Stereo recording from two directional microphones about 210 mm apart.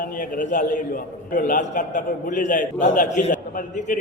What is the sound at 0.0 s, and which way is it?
A man's voice, 40° left (ahead or behind).